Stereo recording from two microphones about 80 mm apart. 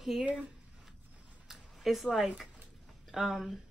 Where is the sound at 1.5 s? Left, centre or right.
Centre.